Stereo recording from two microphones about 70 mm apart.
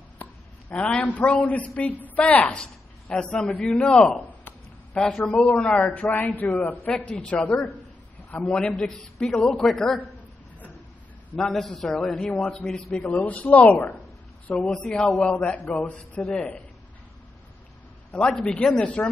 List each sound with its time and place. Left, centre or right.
0.2 s a man's voice: left
2.6 s a sound: centre
3.3 s a man's voice: centre
6.9 s a man's voice: centre
11.3 s a man's voice: centre
12.9 s speech: left
14.5 s a man's voice: centre
18.1 s a man's voice: centre